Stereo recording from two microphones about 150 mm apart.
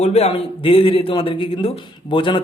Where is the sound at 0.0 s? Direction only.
45° left (ahead or behind).